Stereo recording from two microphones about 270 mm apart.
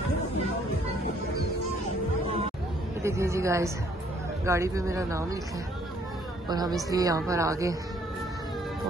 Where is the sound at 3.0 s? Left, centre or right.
Centre.